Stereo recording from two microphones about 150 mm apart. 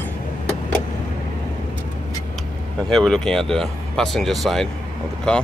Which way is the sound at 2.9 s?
5° left (ahead or behind).